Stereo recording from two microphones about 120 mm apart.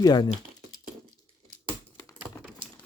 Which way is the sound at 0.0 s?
35° left (ahead or behind).